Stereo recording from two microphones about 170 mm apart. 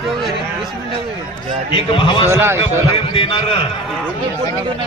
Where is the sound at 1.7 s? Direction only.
30° left (ahead or behind).